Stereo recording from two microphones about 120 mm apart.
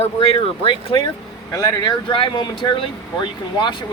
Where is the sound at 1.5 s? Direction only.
30° left (ahead or behind).